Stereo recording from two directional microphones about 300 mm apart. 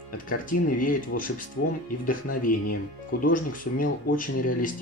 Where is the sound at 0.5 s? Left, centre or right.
Left.